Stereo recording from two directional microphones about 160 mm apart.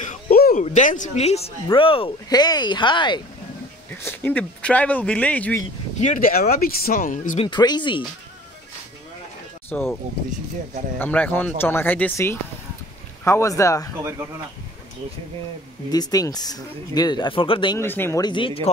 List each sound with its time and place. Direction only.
0.0 s a sound: 50° left (ahead or behind)
0.4 s speech: 55° left (ahead or behind); by 3.2 s 30° left (ahead or behind)
3.9 s speech: 10° left (ahead or behind)
5.9 s speech: 50° left (ahead or behind)
7.4 s speech: 30° left (ahead or behind)
9.7 s speech: 10° left (ahead or behind)
11.0 s speech: 10° left (ahead or behind)
15.9 s speech: 25° left (ahead or behind)
17.7 s speech: 15° left (ahead or behind)
18.2 s speech: 30° left (ahead or behind)